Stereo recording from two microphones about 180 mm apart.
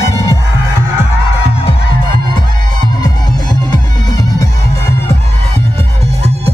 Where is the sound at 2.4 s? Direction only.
25° left (ahead or behind).